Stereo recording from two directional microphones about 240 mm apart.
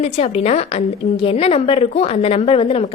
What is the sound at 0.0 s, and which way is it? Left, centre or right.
A woman's voice, left.